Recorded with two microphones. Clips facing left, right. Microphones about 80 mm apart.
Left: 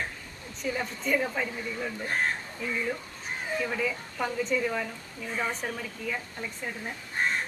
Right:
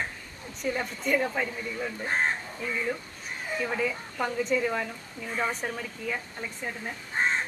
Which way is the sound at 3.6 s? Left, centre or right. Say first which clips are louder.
Right 1 dB; centre.